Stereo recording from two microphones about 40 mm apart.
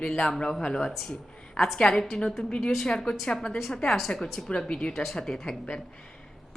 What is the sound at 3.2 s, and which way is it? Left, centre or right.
A woman's voice, centre.